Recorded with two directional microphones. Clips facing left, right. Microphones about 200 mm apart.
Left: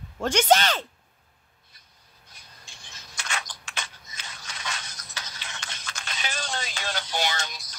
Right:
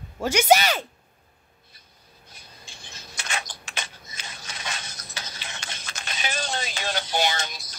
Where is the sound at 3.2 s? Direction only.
20° right (ahead or behind).